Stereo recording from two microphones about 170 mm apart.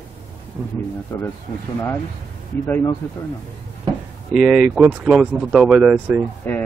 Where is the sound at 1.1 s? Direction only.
15° left (ahead or behind).